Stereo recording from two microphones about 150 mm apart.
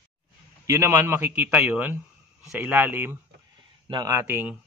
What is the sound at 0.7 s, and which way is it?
A man's voice, 15° right (ahead or behind).